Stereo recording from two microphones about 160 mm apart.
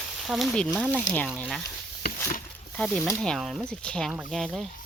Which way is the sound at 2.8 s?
Centre (ahead or behind).